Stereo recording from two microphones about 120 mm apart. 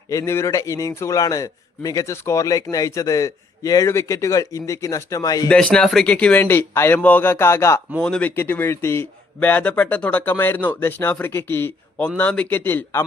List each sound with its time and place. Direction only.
0.1 s a man's voice: 25° left (ahead or behind)
5.5 s speech: 10° left (ahead or behind)
7.9 s speech: 5° left (ahead or behind)
8.4 s speech: 20° left (ahead or behind)